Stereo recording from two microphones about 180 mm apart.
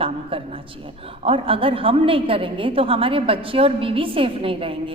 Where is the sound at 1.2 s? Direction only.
30° right (ahead or behind).